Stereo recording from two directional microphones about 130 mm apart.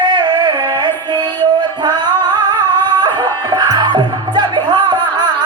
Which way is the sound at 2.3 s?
35° right (ahead or behind).